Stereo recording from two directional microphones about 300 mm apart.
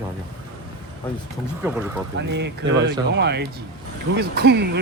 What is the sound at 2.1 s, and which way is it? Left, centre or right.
Speech, right.